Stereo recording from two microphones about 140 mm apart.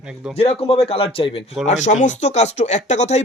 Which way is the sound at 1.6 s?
55° left (ahead or behind).